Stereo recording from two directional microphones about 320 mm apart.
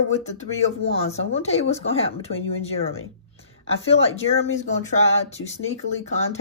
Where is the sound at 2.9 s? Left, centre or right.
Left.